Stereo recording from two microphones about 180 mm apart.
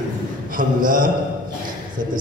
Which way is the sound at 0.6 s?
50° right (ahead or behind).